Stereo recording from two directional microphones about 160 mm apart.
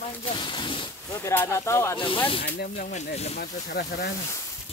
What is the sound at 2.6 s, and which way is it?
Speech, 55° left (ahead or behind).